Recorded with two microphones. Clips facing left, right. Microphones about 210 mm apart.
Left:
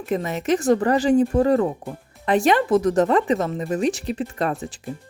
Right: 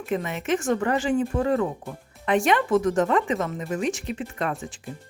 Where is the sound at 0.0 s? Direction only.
40° left (ahead or behind).